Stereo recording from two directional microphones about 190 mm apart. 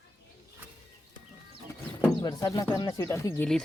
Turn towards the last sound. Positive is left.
turn(degrees=15)  # may be behind; listen again after turning